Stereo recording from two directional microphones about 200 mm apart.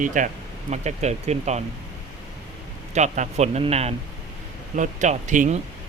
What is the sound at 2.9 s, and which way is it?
Speech, 35° right (ahead or behind).